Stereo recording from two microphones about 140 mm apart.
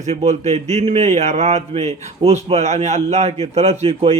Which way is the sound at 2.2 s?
40° right (ahead or behind).